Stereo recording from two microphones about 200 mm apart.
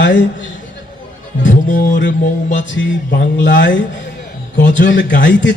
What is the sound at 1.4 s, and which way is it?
Music, 40° left (ahead or behind).